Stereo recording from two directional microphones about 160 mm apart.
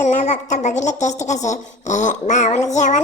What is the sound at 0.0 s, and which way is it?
A child's voice, 45° left (ahead or behind).